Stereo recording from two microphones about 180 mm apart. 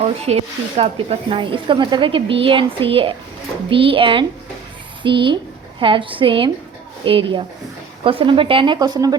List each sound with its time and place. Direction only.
0.0 s speech: 35° right (ahead or behind)